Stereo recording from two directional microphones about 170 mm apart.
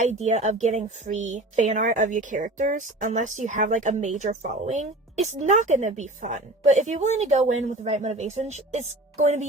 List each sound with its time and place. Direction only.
0.0 s a woman's voice: 40° right (ahead or behind)